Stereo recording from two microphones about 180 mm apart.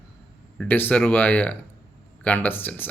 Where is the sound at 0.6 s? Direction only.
10° left (ahead or behind).